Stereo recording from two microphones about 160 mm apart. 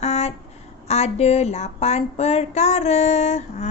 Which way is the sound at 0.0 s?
40° left (ahead or behind).